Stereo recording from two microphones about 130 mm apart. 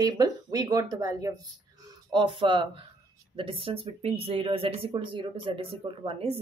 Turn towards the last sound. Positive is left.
turn(degrees=-50)  # may be behind; listen again after turning